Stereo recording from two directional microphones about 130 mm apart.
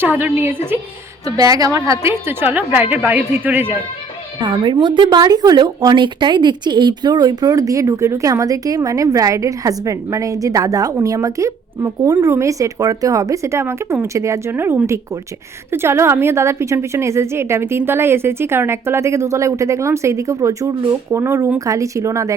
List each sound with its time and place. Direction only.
0.0 s speech: 15° right (ahead or behind)
1.2 s speech: 30° right (ahead or behind)
4.4 s speech: 35° right (ahead or behind)